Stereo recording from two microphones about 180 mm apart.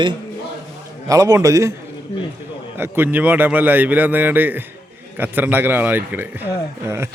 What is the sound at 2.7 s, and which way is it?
A man's voice, 10° right (ahead or behind).